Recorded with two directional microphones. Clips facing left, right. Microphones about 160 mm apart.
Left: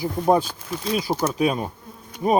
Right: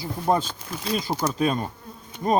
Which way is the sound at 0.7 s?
5° left (ahead or behind).